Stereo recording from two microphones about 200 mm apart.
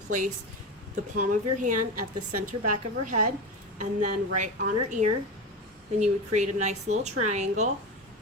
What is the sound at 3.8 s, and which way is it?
Speech, 35° right (ahead or behind).